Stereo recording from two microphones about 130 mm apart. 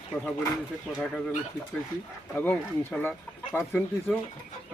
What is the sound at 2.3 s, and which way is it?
Speech, 15° left (ahead or behind).